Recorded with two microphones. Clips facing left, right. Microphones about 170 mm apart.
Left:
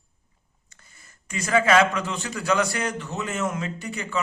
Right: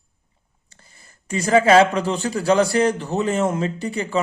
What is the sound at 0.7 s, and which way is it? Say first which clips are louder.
Speech: right 3 dB; 30° right (ahead or behind).